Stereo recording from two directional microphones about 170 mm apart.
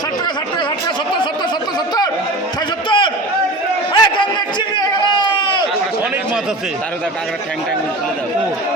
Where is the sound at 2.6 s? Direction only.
30° left (ahead or behind).